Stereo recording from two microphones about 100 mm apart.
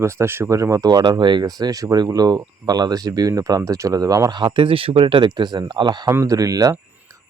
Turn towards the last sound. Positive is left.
turn(degrees=-35)  # may be behind; listen again after turning